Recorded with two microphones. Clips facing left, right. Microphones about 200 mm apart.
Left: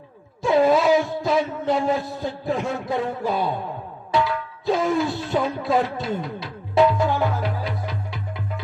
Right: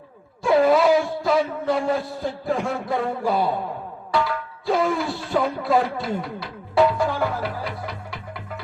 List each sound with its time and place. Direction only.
0.5 s music: 20° left (ahead or behind)
1.2 s a man's voice: 20° left (ahead or behind)
4.1 s music: 20° left (ahead or behind)